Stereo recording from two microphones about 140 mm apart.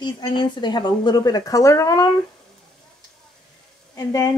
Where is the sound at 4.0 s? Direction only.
25° left (ahead or behind).